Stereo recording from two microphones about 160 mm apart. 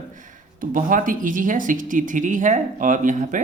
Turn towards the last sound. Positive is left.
turn(degrees=-55)  # may be behind; listen again after turning